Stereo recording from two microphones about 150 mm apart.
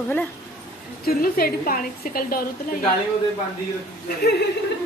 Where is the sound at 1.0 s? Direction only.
85° left.